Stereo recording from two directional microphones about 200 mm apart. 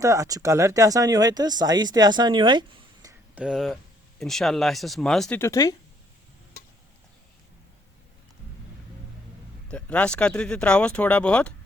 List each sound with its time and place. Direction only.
0.0 s speech: 15° right (ahead or behind)
3.4 s speech: centre (ahead or behind)
5.4 s speech: 15° left (ahead or behind)
9.6 s speech: 5° left (ahead or behind)